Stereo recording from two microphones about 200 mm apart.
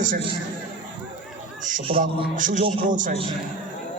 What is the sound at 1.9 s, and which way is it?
Speech, 30° right (ahead or behind).